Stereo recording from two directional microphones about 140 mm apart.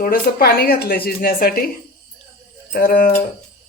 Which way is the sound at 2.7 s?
85° left.